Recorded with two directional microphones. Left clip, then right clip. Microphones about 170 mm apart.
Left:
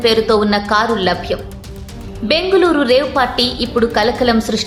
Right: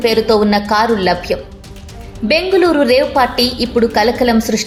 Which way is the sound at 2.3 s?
5° right (ahead or behind).